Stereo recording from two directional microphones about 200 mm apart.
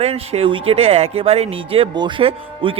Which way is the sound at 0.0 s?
30° right (ahead or behind).